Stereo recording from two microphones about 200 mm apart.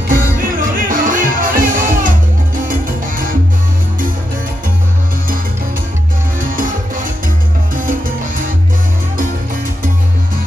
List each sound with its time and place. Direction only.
0.1 s music: 45° right (ahead or behind)
6.4 s music: 45° right (ahead or behind)
7.7 s salsa music: 45° right (ahead or behind)